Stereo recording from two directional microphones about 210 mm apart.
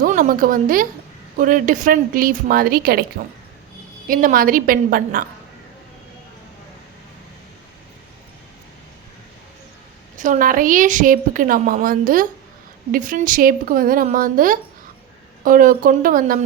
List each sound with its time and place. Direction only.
0.0 s a woman's voice: 40° right (ahead or behind)
10.2 s a woman's voice: 35° right (ahead or behind)